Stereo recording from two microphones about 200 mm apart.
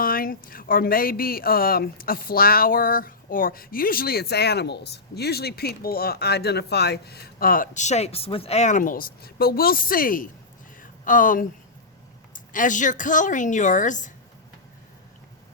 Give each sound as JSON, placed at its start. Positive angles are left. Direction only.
{"t": 0.0, "sound": "a woman's voice", "side_deg": 45}